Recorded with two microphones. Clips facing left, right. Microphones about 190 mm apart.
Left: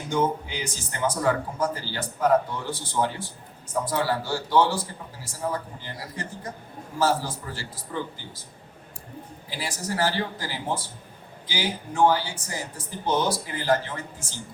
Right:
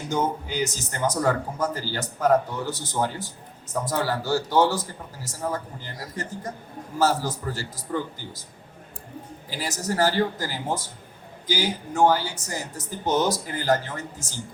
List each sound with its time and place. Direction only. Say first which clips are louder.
0.1 s speech: left 1 dB; 45° right (ahead or behind)
9.5 s speech: right 2 dB; 45° right (ahead or behind)